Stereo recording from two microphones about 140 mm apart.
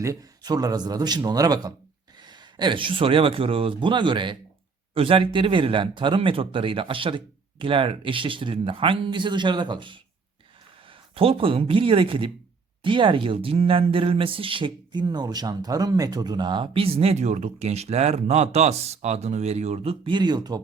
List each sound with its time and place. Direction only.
0.0 s a man's voice: 25° right (ahead or behind)